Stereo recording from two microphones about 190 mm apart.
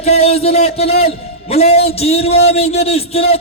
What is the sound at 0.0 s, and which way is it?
A man's voice, 35° left (ahead or behind).